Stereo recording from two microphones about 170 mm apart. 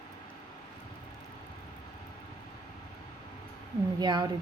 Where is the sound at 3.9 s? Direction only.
25° right (ahead or behind).